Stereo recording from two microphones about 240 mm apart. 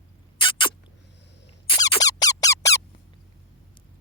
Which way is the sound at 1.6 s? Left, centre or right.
Centre.